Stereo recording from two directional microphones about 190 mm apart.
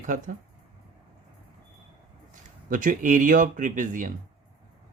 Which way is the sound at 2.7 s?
45° right (ahead or behind).